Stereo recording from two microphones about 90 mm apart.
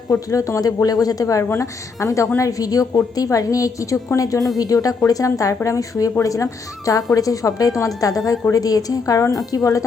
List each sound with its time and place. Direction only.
0.1 s a woman's voice: 40° left (ahead or behind)